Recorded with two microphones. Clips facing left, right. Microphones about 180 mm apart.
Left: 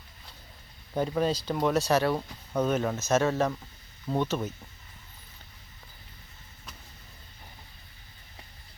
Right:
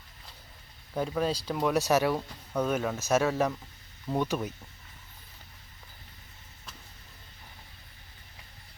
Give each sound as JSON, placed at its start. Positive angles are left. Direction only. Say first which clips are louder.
{"t": 0.9, "sound": "speech", "louder": "left 2 dB", "side_deg": 0}
{"t": 1.7, "sound": "speech", "louder": "right 1 dB", "side_deg": -15}
{"t": 2.1, "sound": "speech", "louder": "left 1 dB", "side_deg": 5}